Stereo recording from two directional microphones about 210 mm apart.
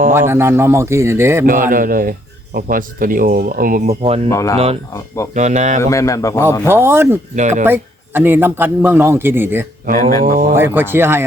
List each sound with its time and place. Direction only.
0.1 s a man's voice: 10° right (ahead or behind)
1.5 s speech: 40° right (ahead or behind)
4.3 s speech: 15° left (ahead or behind)
4.5 s speech: 30° right (ahead or behind)
5.8 s speech: 15° left (ahead or behind)
6.7 s a man's voice: 10° right (ahead or behind)
7.3 s speech: 35° right (ahead or behind)
7.6 s a man's voice: 10° right (ahead or behind)
10.0 s speech: 15° left (ahead or behind)
10.5 s a man's voice: 10° right (ahead or behind)